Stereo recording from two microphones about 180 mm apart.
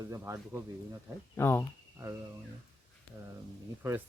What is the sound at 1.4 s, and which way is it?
Speech, 15° left (ahead or behind).